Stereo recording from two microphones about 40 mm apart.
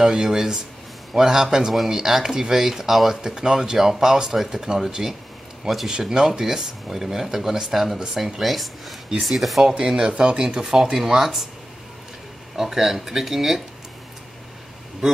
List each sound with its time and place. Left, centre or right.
0.0 s speech: centre
3.2 s speech: centre
8.4 s speech: centre
9.7 s speech: centre
12.5 s speech: centre